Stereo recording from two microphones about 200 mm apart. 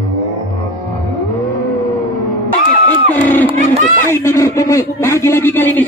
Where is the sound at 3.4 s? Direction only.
35° right (ahead or behind).